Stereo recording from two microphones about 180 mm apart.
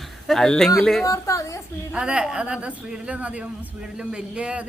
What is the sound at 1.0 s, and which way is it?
Speech, 15° left (ahead or behind).